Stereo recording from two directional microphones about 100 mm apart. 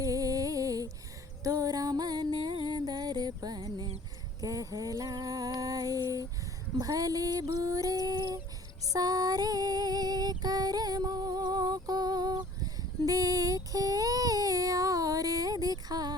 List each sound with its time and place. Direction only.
0.0 s music: 35° right (ahead or behind)
4.4 s a sound: 35° right (ahead or behind)
6.7 s female singing: 35° right (ahead or behind)